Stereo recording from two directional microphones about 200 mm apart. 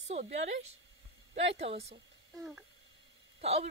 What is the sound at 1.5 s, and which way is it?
Speech, 30° right (ahead or behind).